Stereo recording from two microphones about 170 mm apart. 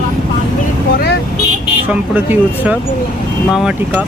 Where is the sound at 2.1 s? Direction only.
10° right (ahead or behind).